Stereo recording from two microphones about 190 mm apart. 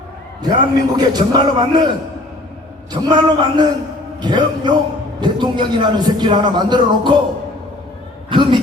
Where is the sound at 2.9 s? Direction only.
20° right (ahead or behind).